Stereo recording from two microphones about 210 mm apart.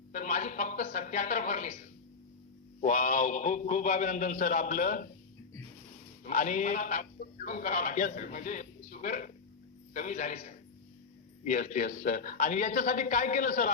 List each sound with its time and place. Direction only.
0.1 s a man's voice: 35° left (ahead or behind)
2.8 s a man's voice: 35° left (ahead or behind)
6.2 s a man's voice: 35° left (ahead or behind)